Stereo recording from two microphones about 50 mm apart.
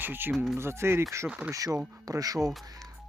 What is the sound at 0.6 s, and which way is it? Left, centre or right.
Speech, right.